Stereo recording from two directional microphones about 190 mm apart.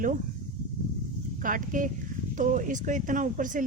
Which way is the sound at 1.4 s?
45° right (ahead or behind).